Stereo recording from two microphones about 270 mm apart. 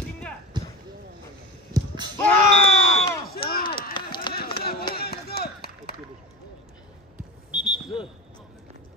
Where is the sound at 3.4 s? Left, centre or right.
Centre.